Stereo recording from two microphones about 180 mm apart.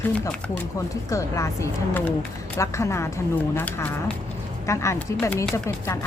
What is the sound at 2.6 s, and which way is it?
Speech, 15° left (ahead or behind).